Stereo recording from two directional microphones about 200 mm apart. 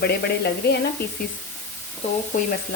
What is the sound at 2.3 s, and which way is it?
Speech, 40° left (ahead or behind).